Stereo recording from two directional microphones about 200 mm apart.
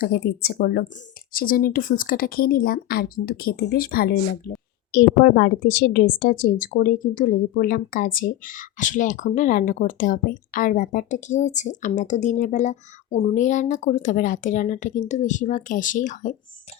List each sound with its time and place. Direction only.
0.0 s a woman's voice: 50° left (ahead or behind)